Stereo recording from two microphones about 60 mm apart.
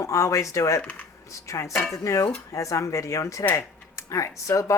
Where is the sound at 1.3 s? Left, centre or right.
Left.